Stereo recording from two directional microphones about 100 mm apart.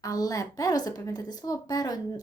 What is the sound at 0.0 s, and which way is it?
Speech, 35° left (ahead or behind).